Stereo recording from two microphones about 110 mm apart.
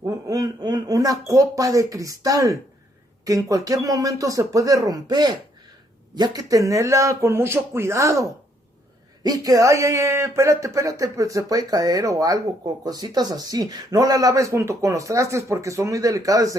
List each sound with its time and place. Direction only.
0.0 s speech: 35° right (ahead or behind)